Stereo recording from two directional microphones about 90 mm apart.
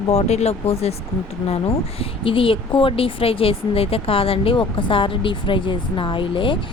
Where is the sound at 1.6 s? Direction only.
85° left.